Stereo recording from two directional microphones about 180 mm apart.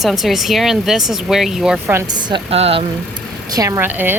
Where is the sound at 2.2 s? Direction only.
25° right (ahead or behind).